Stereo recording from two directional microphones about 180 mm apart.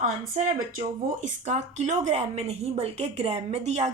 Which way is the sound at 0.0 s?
45° right (ahead or behind).